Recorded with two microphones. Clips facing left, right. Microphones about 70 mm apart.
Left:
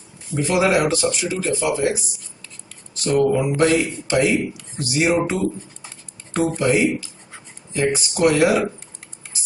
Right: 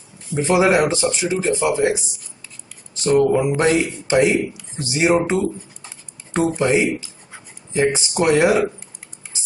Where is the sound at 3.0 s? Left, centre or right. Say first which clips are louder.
Right 2 dB; right.